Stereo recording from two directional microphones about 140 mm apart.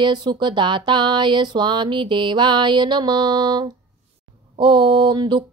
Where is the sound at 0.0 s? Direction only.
30° right (ahead or behind).